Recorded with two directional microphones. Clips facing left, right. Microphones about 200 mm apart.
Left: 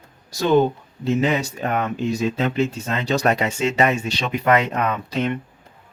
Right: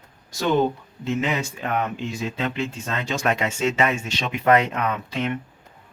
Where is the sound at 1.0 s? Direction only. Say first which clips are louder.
Left 4 dB; 35° left (ahead or behind).